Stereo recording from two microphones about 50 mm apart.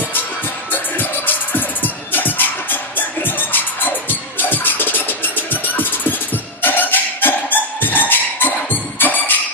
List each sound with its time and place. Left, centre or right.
0.7 s music: left